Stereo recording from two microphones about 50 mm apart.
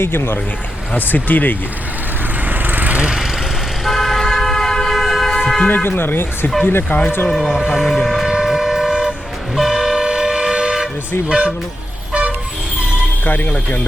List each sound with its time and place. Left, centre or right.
0.0 s speech: left
0.9 s speech: left
2.5 s vehicle: right
3.8 s car: centre
4.9 s vehicle: centre
5.6 s speech: left
7.3 s speech: centre
7.9 s train: centre
8.1 s train: centre
9.6 s vehicle: centre
11.3 s speech: centre
13.2 s speech: left